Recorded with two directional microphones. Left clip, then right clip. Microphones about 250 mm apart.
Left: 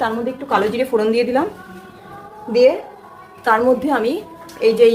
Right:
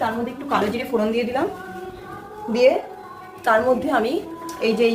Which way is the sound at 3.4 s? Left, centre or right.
Left.